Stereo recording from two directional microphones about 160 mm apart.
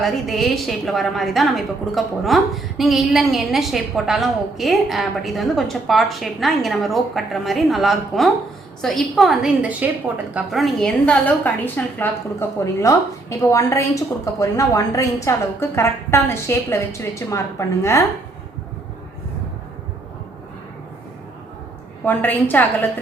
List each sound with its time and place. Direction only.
0.0 s a woman's voice: centre (ahead or behind); by 18.0 s 20° left (ahead or behind)
22.0 s a woman's voice: 10° left (ahead or behind)